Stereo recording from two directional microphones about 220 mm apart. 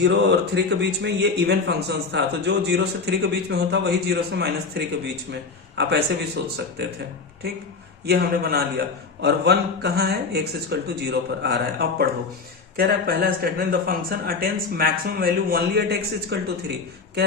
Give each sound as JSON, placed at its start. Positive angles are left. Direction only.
{"t": 0.0, "sound": "speech", "side_deg": -50}
{"t": 8.0, "sound": "speech", "side_deg": -45}